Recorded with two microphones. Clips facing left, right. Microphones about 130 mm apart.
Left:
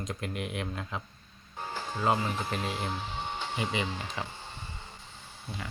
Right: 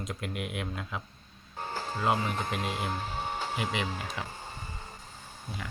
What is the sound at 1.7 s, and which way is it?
Music, 35° right (ahead or behind).